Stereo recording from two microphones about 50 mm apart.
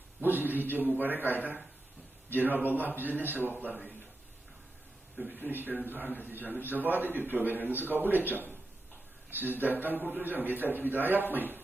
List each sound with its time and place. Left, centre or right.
0.2 s a man's voice: right
5.3 s a man's voice: right